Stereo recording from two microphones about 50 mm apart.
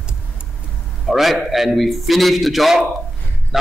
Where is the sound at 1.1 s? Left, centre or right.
Centre.